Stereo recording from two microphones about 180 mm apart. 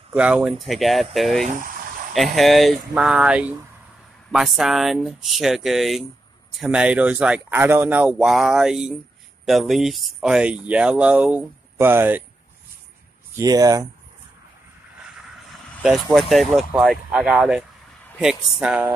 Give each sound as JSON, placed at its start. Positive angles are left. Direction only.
{"t": 0.1, "sound": "speech", "side_deg": -5}
{"t": 13.4, "sound": "speech", "side_deg": -20}
{"t": 15.8, "sound": "speech", "side_deg": 0}
{"t": 18.0, "sound": "a sound", "side_deg": 0}
{"t": 18.6, "sound": "speech", "side_deg": -5}